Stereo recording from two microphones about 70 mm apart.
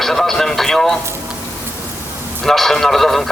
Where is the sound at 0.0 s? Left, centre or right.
Centre.